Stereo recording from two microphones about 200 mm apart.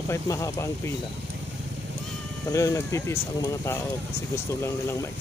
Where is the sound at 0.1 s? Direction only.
15° left (ahead or behind).